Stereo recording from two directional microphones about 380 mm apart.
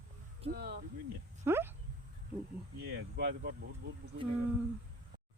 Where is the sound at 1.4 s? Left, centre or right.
Centre.